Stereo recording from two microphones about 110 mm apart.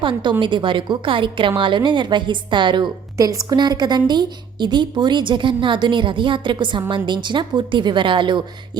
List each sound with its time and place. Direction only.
0.0 s a woman's voice: 45° right (ahead or behind)
3.2 s a woman's voice: 35° right (ahead or behind)